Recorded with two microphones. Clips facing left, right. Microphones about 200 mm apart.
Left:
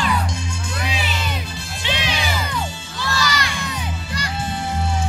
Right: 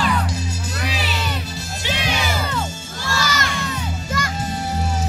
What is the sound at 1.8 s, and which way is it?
Music, 45° right (ahead or behind).